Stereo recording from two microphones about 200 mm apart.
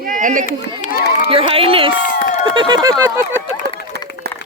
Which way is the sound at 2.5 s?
20° right (ahead or behind).